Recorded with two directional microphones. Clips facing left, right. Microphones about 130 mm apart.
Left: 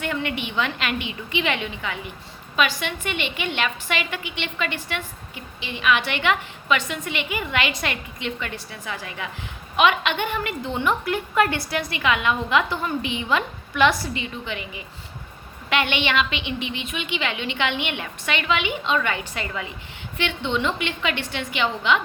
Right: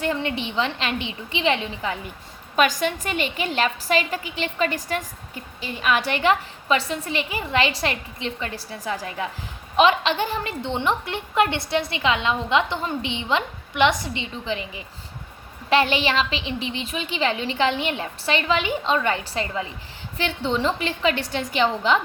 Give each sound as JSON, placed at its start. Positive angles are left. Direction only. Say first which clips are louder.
{"t": 0.0, "sound": "a woman's voice", "louder": "right 2 dB", "side_deg": -30}